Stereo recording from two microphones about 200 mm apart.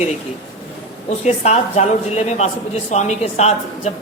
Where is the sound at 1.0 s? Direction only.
35° left (ahead or behind).